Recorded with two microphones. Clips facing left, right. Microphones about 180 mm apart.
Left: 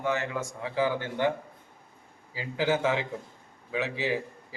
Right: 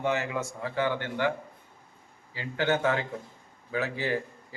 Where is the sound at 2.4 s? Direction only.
5° left (ahead or behind).